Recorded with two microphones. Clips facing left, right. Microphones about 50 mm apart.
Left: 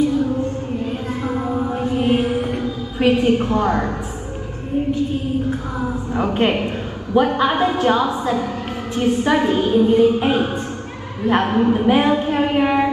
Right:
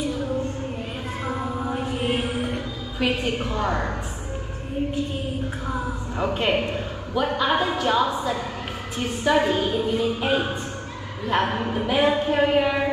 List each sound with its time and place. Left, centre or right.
2.0 s a woman's voice: left
5.8 s a woman's voice: left